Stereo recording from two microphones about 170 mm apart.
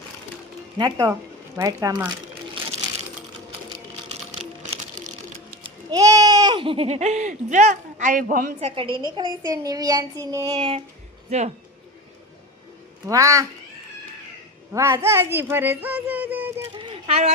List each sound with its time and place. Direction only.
0.8 s child singing: 25° right (ahead or behind)
4.1 s a sound: 35° right (ahead or behind)
5.9 s speech: 20° right (ahead or behind); by 8.7 s 50° right (ahead or behind)
8.7 s a woman's voice: 30° right (ahead or behind)
9.0 s child singing: 25° right (ahead or behind)
11.3 s a woman's voice: 40° right (ahead or behind)
13.1 s child singing: 20° right (ahead or behind)
14.7 s speech: 15° right (ahead or behind)
16.7 s a sound: 35° right (ahead or behind)